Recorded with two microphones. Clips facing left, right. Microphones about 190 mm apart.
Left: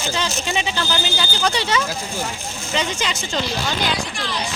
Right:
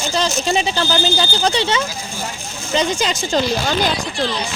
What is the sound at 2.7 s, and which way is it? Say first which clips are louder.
Speech: right 5 dB; 40° right (ahead or behind).